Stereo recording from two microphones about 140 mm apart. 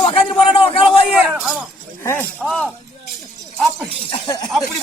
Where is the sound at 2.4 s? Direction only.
Centre (ahead or behind).